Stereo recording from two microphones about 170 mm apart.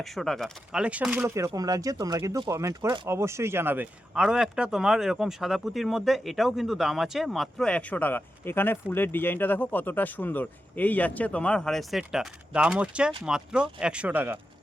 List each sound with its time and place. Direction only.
0.0 s speech: centre (ahead or behind); by 3.1 s 30° right (ahead or behind)
3.1 s speech: 15° right (ahead or behind)